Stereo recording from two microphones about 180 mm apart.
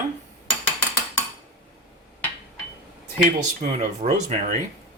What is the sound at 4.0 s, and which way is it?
Speech, 40° right (ahead or behind).